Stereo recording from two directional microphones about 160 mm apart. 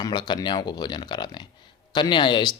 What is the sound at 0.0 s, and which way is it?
Speech, 25° left (ahead or behind).